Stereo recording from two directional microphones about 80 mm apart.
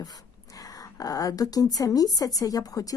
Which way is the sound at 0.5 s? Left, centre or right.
Left.